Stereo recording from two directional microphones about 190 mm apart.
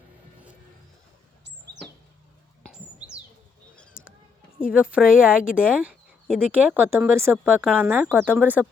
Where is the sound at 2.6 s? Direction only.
5° right (ahead or behind).